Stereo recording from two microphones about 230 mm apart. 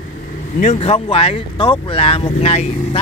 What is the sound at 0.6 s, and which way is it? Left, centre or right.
Speech, left.